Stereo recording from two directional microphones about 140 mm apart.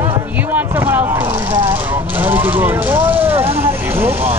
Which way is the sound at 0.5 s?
10° right (ahead or behind).